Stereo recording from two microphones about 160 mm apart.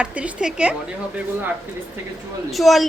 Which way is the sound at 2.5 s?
Centre (ahead or behind).